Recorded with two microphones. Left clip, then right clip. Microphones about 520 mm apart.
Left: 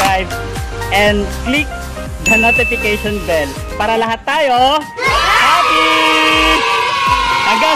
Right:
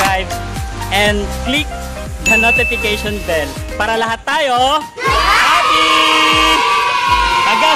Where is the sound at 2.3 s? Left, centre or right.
Right.